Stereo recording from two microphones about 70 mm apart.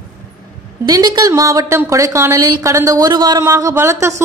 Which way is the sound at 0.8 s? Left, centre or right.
Right.